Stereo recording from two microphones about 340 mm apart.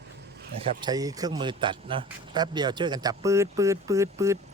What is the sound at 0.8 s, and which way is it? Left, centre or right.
Speech, centre.